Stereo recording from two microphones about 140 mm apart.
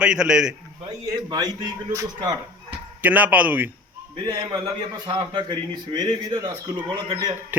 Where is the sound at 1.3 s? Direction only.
30° right (ahead or behind).